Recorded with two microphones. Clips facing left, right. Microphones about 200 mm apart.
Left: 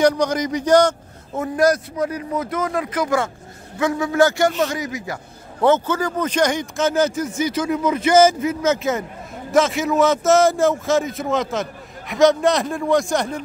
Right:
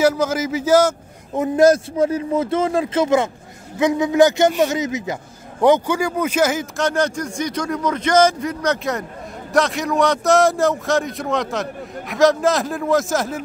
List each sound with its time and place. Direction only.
0.0 s a man's voice: 5° right (ahead or behind)
1.3 s a man's voice: 20° right (ahead or behind); by 13.4 s centre (ahead or behind)